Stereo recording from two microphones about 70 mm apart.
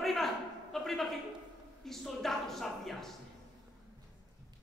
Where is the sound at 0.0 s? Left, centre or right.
Centre.